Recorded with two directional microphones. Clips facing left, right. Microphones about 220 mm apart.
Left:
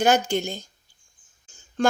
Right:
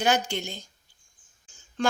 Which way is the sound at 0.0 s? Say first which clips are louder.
Left 5 dB; 45° left (ahead or behind).